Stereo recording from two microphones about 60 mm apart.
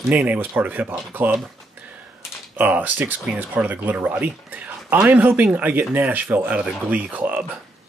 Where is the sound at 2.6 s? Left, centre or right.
Right.